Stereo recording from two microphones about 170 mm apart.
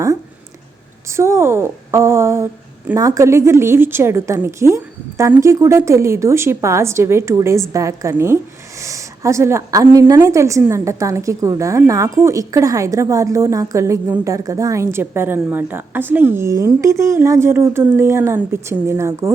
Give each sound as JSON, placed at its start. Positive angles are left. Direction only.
{"t": 1.1, "sound": "a woman's voice", "side_deg": -15}